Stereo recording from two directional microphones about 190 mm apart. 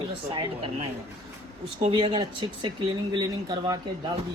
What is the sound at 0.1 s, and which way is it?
Speech, 30° right (ahead or behind).